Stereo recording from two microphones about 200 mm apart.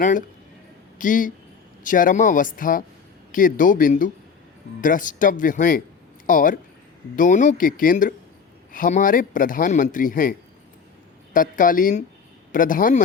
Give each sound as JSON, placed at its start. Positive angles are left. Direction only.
{"t": 0.0, "sound": "speech", "side_deg": 40}
{"t": 11.3, "sound": "speech", "side_deg": 45}